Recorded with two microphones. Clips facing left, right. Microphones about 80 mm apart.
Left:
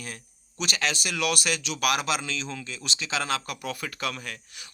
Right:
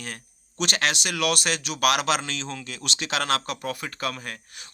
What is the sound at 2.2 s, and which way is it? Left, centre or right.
Speech, right.